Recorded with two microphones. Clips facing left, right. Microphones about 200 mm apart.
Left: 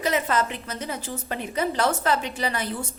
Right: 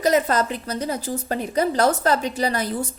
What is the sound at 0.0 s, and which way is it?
A woman's voice, 40° right (ahead or behind).